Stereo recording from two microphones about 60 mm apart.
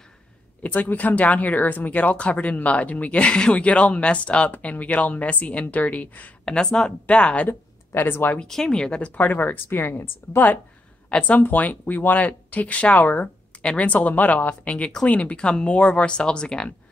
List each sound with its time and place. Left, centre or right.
0.6 s speech: left
6.4 s speech: centre
7.4 s speech: left
8.5 s speech: centre; by 10.6 s left
11.1 s speech: left